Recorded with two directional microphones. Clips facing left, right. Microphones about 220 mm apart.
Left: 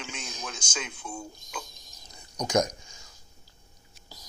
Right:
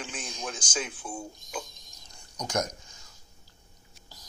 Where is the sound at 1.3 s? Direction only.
Centre (ahead or behind).